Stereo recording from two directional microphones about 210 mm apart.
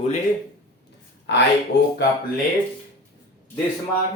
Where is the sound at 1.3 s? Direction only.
55° left (ahead or behind).